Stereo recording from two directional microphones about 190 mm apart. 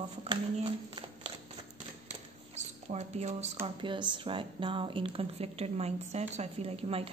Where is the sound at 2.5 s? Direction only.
35° right (ahead or behind).